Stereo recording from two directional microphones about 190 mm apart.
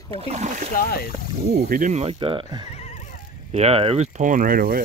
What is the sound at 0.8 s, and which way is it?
Speech, 50° left (ahead or behind).